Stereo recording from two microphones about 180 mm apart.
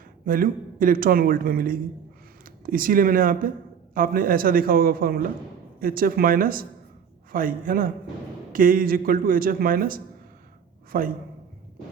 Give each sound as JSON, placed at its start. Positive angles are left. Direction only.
{"t": 0.3, "sound": "speech", "side_deg": -50}